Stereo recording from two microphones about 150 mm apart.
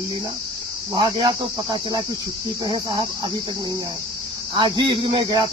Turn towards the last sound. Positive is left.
turn(degrees=-30)  # may be behind; listen again after turning